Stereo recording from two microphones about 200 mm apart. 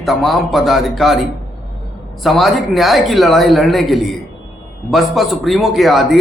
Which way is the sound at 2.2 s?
Centre (ahead or behind).